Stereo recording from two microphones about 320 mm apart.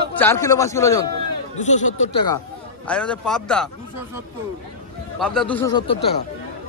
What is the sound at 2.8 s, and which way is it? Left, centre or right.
Speech, centre.